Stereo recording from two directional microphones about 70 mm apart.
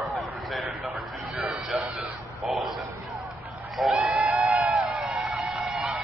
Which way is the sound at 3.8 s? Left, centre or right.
Centre.